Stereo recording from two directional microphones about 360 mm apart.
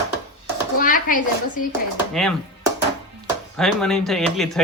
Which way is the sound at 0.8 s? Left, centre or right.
Left.